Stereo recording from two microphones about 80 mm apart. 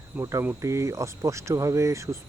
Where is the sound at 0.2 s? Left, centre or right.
Right.